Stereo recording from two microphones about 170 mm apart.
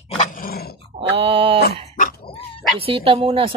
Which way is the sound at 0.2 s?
55° left (ahead or behind).